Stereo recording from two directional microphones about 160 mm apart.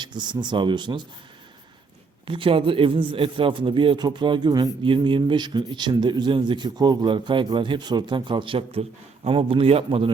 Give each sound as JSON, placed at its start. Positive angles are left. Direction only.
{"t": 0.0, "sound": "speech", "side_deg": -30}
{"t": 2.2, "sound": "a man's voice", "side_deg": -35}